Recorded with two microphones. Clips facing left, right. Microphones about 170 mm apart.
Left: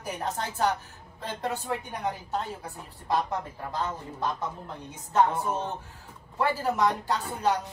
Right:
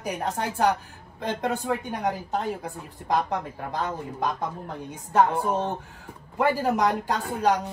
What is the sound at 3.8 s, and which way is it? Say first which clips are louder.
A man's voice: right 3 dB; 15° right (ahead or behind).